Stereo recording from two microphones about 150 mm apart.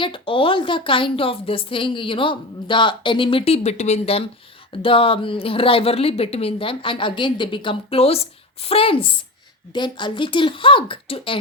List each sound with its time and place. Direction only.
0.0 s a woman's voice: 35° left (ahead or behind)